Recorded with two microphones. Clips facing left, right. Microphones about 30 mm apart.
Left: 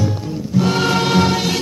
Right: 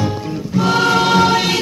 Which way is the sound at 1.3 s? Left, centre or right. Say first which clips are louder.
Right 3 dB; right.